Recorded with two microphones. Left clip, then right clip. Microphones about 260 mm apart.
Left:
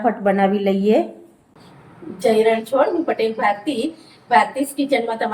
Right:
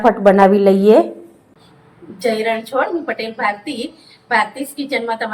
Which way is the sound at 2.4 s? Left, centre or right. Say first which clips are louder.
Left 2 dB; centre.